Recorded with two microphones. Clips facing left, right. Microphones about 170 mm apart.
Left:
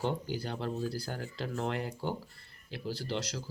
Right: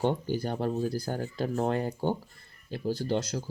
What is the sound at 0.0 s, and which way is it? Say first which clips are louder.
Speech: right 6 dB; 25° right (ahead or behind).